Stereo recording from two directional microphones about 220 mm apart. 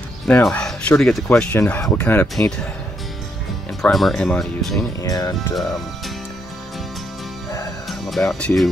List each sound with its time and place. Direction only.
0.3 s speech: 5° left (ahead or behind)
3.8 s speech: centre (ahead or behind)
5.0 s speech: 15° left (ahead or behind)
8.0 s speech: centre (ahead or behind)